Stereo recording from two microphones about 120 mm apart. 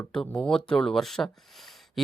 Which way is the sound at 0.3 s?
5° left (ahead or behind).